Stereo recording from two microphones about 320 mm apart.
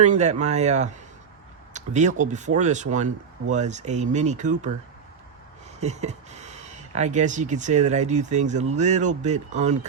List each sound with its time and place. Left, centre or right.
0.0 s speech: right
5.8 s speech: right